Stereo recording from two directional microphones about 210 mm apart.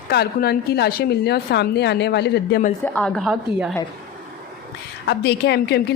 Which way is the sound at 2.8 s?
5° left (ahead or behind).